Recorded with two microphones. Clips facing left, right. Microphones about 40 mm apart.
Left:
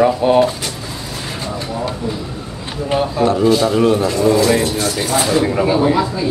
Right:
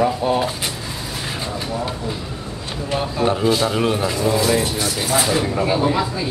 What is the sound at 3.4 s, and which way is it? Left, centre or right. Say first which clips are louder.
Speech: left 5 dB; centre.